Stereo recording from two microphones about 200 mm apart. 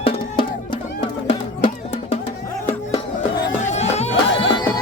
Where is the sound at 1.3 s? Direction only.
35° left (ahead or behind).